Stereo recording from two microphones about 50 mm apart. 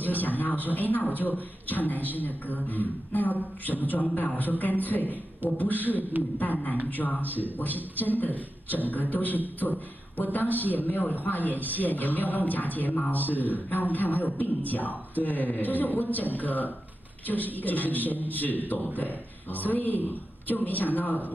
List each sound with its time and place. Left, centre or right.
0.0 s a man's voice: left